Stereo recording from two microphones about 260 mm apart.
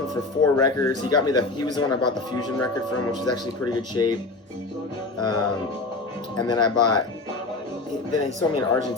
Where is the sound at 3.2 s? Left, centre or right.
Centre.